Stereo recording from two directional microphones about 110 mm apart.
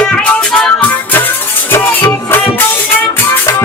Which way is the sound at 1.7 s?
20° left (ahead or behind).